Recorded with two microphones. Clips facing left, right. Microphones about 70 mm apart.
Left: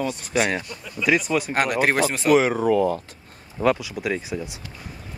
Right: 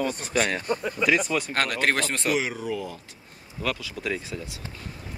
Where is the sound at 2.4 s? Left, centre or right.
Left.